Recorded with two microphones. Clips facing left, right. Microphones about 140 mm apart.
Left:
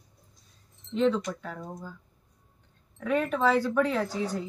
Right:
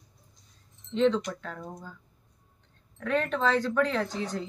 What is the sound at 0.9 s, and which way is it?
Speech, 5° left (ahead or behind).